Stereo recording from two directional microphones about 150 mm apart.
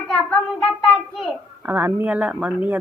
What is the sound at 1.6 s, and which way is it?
Speech, 10° right (ahead or behind).